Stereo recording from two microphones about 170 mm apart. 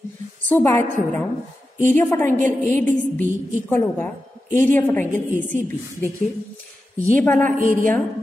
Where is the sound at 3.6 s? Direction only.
10° left (ahead or behind).